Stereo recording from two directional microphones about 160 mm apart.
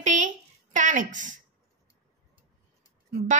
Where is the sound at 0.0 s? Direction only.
50° right (ahead or behind).